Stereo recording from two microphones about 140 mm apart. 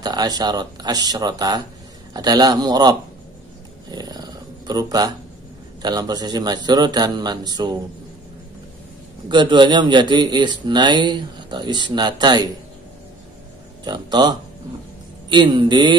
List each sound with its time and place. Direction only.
0.0 s speech: 30° right (ahead or behind)
3.9 s purr: 30° right (ahead or behind)
5.8 s speech: 30° right (ahead or behind)
9.3 s speech: 35° right (ahead or behind)
13.8 s speech: 30° right (ahead or behind)